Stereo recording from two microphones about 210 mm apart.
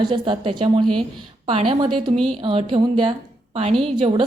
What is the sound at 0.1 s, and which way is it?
A woman's voice, 25° right (ahead or behind).